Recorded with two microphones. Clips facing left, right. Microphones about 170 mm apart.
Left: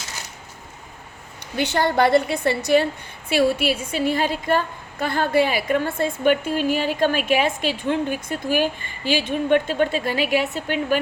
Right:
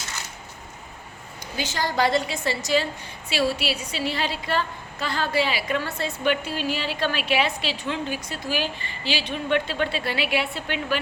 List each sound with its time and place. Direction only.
1.5 s a woman's voice: 60° left (ahead or behind); by 10.9 s 45° left (ahead or behind)